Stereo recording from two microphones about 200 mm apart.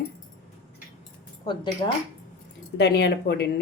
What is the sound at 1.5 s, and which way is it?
Speech, 25° left (ahead or behind).